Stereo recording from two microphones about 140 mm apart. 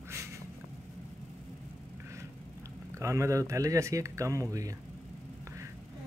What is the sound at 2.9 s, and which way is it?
Speech, 20° right (ahead or behind).